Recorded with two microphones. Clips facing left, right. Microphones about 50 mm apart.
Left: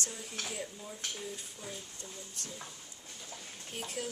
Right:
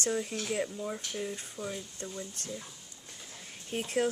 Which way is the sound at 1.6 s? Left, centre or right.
Right.